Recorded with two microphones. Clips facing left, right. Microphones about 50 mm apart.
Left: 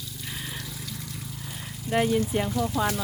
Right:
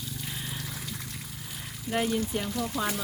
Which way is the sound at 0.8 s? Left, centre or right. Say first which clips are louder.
Even; right.